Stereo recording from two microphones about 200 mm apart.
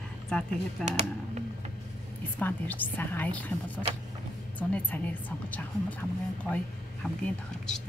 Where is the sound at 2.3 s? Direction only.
10° left (ahead or behind).